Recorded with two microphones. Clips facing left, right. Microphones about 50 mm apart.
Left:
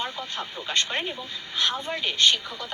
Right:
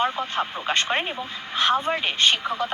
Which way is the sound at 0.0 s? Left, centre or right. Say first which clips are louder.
Right 8 dB; right.